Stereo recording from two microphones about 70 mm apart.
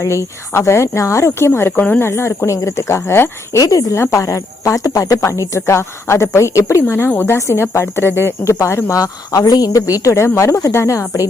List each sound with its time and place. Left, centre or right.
0.5 s speech: left
3.6 s a woman's voice: left
3.9 s speech: left
6.8 s speech: left
8.5 s speech: left